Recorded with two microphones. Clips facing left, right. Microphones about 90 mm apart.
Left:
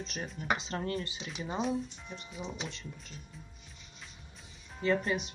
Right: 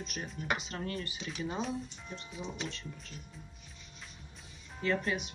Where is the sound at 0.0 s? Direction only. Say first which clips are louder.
Left 1 dB; 30° left (ahead or behind); by 2.7 s centre (ahead or behind).